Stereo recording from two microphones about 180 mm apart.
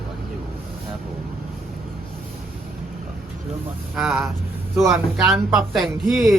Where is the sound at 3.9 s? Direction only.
Centre (ahead or behind).